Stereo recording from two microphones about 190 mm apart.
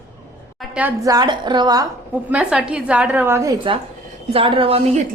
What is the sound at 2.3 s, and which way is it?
A woman's voice, 5° right (ahead or behind).